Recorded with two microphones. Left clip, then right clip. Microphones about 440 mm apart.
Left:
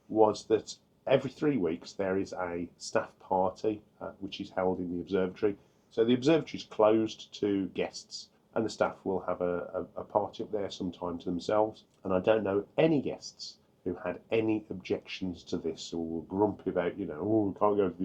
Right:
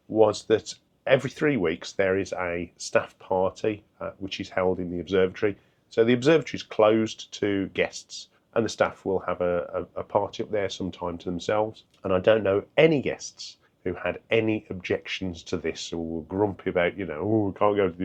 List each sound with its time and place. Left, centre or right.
0.2 s speech: right